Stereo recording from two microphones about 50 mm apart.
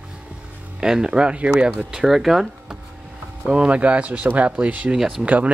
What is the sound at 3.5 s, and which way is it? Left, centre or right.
Speech, right.